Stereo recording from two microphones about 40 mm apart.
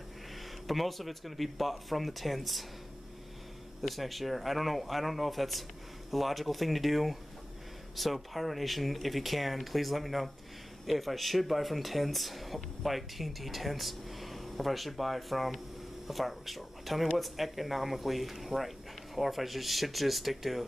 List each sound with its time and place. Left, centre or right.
0.7 s speech: centre
3.8 s speech: centre